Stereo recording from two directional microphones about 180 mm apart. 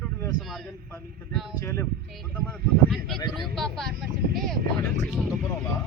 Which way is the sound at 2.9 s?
Centre (ahead or behind).